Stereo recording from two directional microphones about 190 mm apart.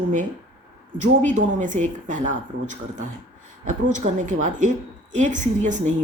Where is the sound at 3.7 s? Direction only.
40° right (ahead or behind).